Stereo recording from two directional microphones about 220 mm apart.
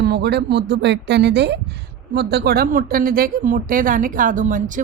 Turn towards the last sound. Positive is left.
turn(degrees=-35)  # may be behind; listen again after turning